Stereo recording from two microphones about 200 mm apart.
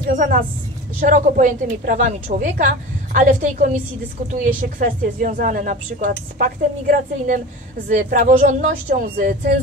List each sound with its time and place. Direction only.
0.0 s a woman's voice: 45° right (ahead or behind)